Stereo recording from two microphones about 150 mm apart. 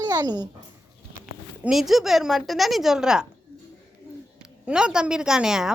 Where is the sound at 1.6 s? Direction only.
Centre (ahead or behind).